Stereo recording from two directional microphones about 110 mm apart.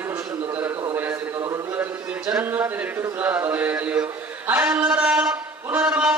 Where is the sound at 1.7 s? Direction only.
15° right (ahead or behind).